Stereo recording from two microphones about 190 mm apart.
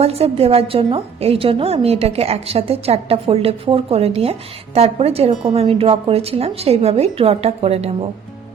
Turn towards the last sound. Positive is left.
turn(degrees=-35)  # may be behind; listen again after turning